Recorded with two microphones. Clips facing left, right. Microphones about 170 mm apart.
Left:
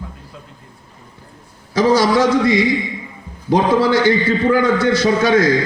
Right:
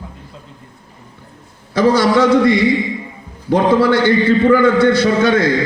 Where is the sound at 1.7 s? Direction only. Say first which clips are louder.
Right 1 dB; 60° right (ahead or behind).